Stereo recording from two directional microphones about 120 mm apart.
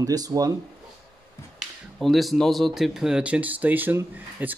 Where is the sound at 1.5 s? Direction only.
Centre (ahead or behind).